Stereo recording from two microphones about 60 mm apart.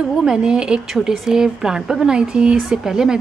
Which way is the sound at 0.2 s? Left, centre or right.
Centre.